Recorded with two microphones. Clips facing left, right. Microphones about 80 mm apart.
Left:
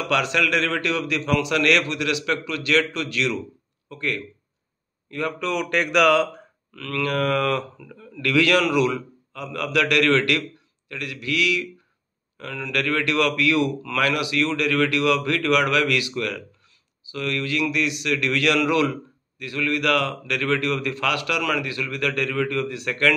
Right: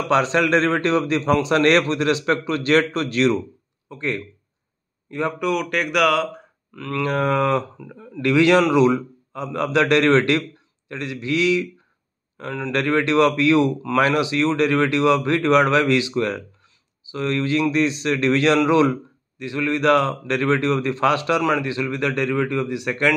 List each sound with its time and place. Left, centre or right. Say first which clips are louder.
0.0 s a man's voice: right 4 dB; right
5.5 s speech: left 3 dB; centre
6.7 s a man's voice: right 2 dB; centre